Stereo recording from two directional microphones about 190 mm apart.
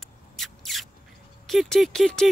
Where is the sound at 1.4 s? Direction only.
Centre (ahead or behind).